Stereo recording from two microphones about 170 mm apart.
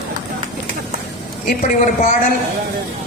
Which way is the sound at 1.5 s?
50° left (ahead or behind).